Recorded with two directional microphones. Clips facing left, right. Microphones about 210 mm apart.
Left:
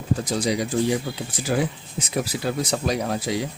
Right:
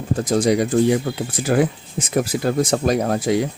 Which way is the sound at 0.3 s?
50° right (ahead or behind).